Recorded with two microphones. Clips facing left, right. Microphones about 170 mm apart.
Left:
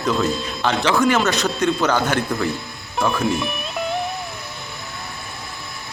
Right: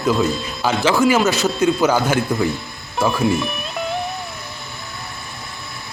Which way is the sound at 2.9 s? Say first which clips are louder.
Right 2 dB; 5° right (ahead or behind).